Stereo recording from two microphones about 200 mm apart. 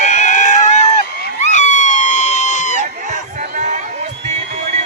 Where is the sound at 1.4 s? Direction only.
35° left (ahead or behind).